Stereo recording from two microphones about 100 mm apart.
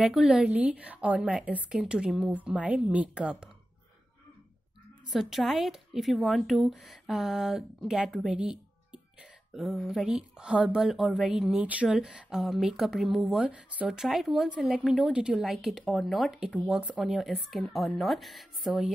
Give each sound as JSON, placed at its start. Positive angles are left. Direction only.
{"t": 0.0, "sound": "a woman's voice", "side_deg": -5}
{"t": 5.0, "sound": "speech", "side_deg": 0}
{"t": 13.4, "sound": "a woman's voice", "side_deg": -15}
{"t": 13.8, "sound": "speech", "side_deg": 0}